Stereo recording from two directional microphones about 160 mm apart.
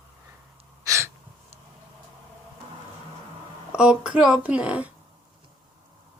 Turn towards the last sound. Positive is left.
turn(degrees=-10)  # may be behind; listen again after turning